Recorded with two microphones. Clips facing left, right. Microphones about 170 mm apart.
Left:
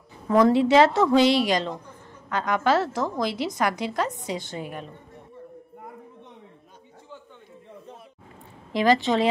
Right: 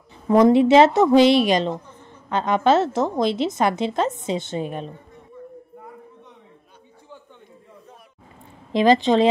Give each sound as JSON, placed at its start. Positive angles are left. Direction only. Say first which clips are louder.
{"t": 0.3, "sound": "a woman's voice", "louder": "right 4 dB", "side_deg": -20}
{"t": 8.7, "sound": "a woman's voice", "louder": "right 5 dB", "side_deg": -20}